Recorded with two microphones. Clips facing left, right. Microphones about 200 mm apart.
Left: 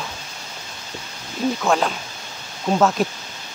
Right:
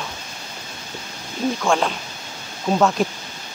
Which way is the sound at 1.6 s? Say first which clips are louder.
Even; centre (ahead or behind).